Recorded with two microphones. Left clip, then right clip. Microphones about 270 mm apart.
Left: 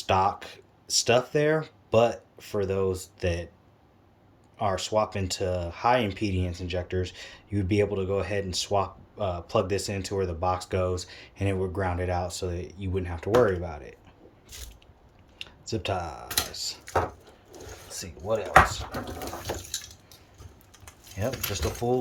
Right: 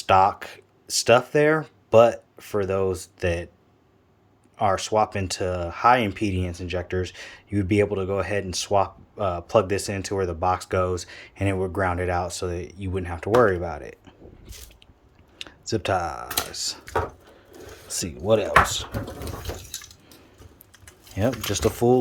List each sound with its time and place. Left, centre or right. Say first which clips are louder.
0.0 s speech: right 6 dB; centre
4.5 s speech: right 5 dB; centre
15.4 s speech: right 5 dB; centre
17.8 s speech: right 10 dB; right
18.3 s chopping: right 2 dB; right
21.2 s chopping: right 7 dB; right